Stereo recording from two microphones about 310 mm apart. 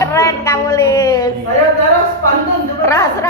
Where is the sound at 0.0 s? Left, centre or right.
Centre.